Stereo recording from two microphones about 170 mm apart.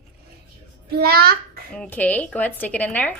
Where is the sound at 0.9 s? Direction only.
65° right (ahead or behind).